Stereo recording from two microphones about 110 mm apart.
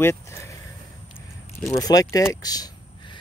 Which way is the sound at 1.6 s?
30° left (ahead or behind).